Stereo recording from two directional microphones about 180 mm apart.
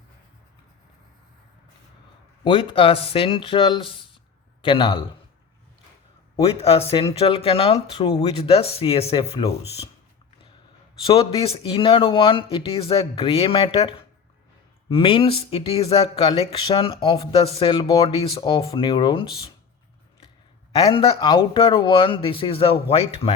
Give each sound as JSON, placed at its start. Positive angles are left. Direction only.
{"t": 2.4, "sound": "speech", "side_deg": 25}
{"t": 6.4, "sound": "speech", "side_deg": 35}
{"t": 11.0, "sound": "speech", "side_deg": 30}
{"t": 20.8, "sound": "speech", "side_deg": 30}